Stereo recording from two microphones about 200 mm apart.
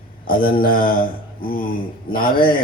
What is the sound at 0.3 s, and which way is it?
Speech, 45° left (ahead or behind).